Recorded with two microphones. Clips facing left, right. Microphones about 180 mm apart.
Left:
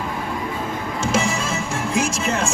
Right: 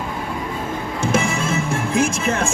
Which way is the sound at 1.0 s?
55° right (ahead or behind).